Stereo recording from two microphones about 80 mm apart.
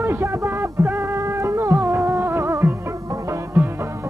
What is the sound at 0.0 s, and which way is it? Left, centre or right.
Music, right.